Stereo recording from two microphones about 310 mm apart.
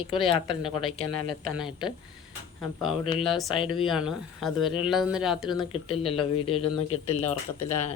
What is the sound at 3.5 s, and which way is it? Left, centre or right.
Speech, centre.